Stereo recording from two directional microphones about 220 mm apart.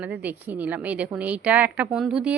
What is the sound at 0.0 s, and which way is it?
Speech, 5° right (ahead or behind).